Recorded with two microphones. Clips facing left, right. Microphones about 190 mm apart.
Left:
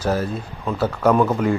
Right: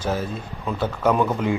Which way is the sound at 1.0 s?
5° right (ahead or behind).